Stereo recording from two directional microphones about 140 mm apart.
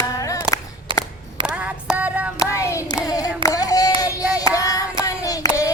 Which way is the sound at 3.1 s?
25° left (ahead or behind).